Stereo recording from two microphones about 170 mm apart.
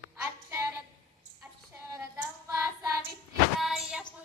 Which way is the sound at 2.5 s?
15° right (ahead or behind).